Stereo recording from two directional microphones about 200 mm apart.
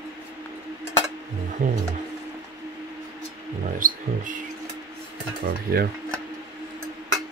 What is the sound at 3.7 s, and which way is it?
Speech, 40° right (ahead or behind).